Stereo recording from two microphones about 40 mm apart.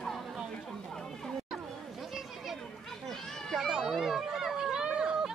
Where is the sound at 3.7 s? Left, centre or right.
Centre.